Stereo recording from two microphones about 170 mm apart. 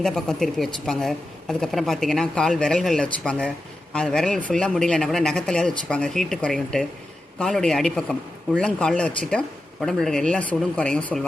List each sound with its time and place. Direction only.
0.0 s a woman's voice: centre (ahead or behind)